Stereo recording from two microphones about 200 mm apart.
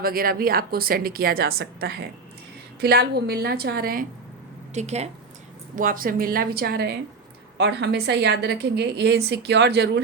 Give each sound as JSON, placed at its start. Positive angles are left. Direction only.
{"t": 0.0, "sound": "a woman's voice", "side_deg": -45}
{"t": 4.7, "sound": "a woman's voice", "side_deg": -35}